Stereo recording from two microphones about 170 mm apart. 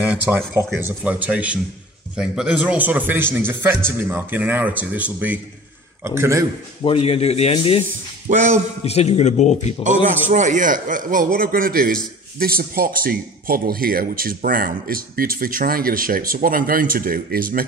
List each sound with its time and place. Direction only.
0.0 s speech: 10° right (ahead or behind)
6.8 s speech: 35° left (ahead or behind)
8.3 s a man's voice: 45° right (ahead or behind)
8.8 s speech: 40° left (ahead or behind)
10.3 s a man's voice: 45° right (ahead or behind)